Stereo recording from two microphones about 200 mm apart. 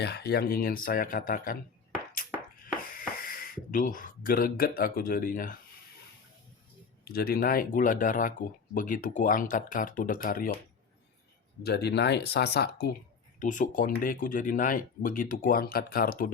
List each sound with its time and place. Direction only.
0.0 s speech: 55° left (ahead or behind)
3.2 s speech: 45° left (ahead or behind)
7.1 s speech: 50° left (ahead or behind)
11.6 s speech: 55° left (ahead or behind)
13.4 s speech: 40° left (ahead or behind)